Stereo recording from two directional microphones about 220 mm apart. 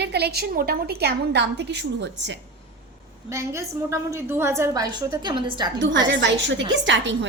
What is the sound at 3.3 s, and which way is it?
A woman's voice, 10° right (ahead or behind).